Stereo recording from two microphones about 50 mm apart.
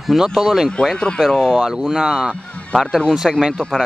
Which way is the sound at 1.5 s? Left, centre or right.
Centre.